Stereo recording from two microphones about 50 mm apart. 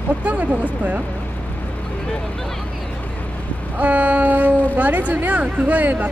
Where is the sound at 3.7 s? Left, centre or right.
Right.